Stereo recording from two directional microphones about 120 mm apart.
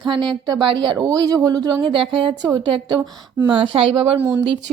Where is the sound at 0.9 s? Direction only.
30° right (ahead or behind).